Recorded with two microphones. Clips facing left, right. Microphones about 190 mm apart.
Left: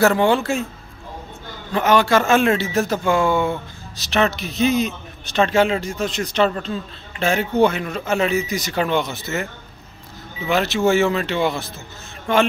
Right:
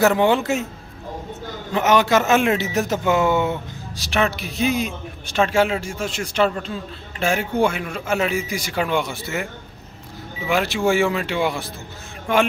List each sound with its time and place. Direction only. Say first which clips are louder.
0.0 s a man's voice: left 1 dB; 15° right (ahead or behind)
1.7 s a man's voice: left 1 dB; 20° right (ahead or behind)